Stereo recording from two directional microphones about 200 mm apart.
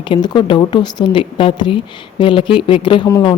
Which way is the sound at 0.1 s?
25° left (ahead or behind).